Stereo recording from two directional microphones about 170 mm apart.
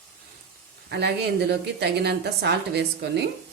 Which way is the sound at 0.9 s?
75° right (ahead or behind).